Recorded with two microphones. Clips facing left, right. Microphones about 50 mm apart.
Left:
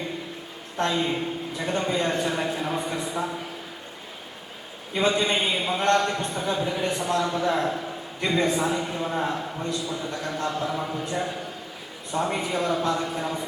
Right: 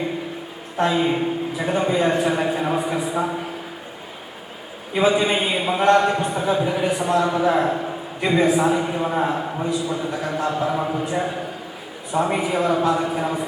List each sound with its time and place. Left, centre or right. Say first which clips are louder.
0.8 s a man's voice: right 5 dB; centre
4.9 s a man's voice: right 5 dB; centre